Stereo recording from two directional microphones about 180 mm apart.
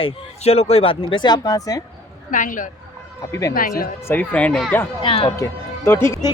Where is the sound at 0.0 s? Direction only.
35° left (ahead or behind); by 1.8 s 20° left (ahead or behind).